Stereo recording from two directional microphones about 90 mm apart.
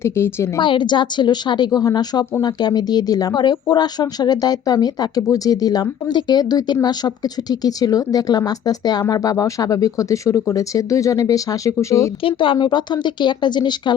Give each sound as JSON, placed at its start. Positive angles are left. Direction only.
{"t": 0.0, "sound": "a woman's voice", "side_deg": 30}
{"t": 0.6, "sound": "speech", "side_deg": 60}
{"t": 12.2, "sound": "speech", "side_deg": 70}